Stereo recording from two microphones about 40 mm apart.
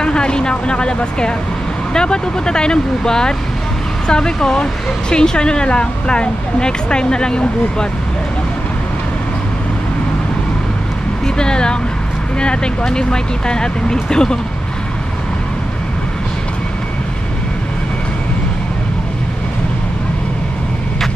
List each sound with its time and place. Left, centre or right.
0.0 s speech: left
11.2 s speech: left
12.8 s speech: centre